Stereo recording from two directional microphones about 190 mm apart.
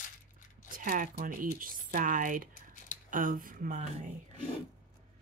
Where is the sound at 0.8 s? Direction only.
45° right (ahead or behind).